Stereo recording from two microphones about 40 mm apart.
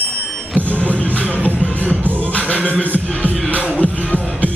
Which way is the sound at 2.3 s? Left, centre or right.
Left.